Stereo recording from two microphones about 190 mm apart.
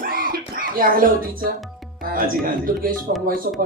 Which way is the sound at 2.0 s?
50° right (ahead or behind).